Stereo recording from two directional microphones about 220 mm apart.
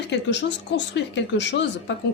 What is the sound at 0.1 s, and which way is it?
A woman's voice, 55° left (ahead or behind).